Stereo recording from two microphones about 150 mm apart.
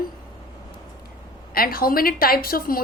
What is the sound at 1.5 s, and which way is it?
A woman's voice, 80° left.